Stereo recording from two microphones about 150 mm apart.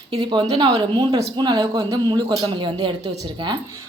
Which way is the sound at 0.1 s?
30° right (ahead or behind).